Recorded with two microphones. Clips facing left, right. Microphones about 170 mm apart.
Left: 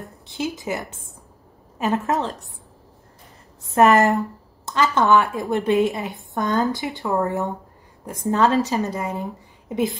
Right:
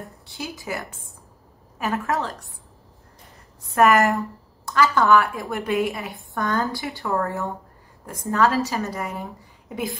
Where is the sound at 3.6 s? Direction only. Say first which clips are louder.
Left 2 dB; 25° left (ahead or behind).